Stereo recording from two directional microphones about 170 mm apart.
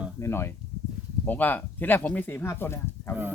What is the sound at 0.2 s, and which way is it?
Speech, 15° left (ahead or behind).